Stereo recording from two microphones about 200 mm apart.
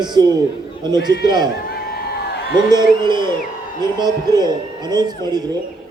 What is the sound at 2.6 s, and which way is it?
A man's voice, 20° right (ahead or behind).